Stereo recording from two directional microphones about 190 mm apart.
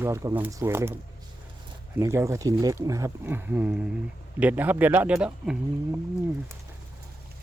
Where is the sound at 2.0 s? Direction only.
15° right (ahead or behind).